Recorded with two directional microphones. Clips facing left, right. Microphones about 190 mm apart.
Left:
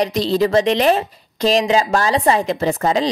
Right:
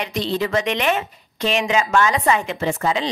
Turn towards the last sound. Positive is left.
turn(degrees=40)  # may be behind; listen again after turning